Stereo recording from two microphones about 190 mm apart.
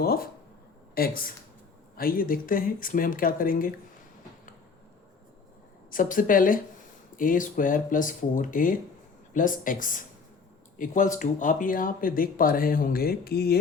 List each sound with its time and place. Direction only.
0.0 s a sound: 55° left (ahead or behind)
0.9 s speech: 50° left (ahead or behind)
5.9 s speech: 45° left (ahead or behind)